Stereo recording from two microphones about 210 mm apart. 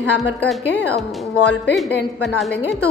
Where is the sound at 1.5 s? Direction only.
55° left (ahead or behind).